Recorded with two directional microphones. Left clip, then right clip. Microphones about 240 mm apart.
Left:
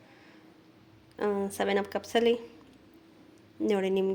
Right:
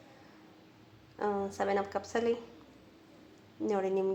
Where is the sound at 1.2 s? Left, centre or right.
Left.